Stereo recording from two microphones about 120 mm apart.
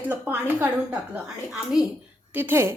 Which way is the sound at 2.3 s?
15° right (ahead or behind).